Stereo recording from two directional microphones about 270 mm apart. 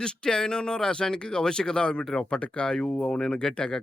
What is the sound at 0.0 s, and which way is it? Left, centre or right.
Speech, centre.